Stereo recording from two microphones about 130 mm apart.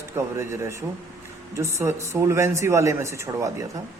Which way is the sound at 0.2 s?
20° right (ahead or behind).